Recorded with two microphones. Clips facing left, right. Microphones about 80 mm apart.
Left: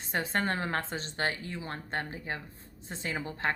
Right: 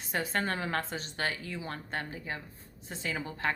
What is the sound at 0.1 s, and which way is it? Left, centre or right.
A woman's voice, left.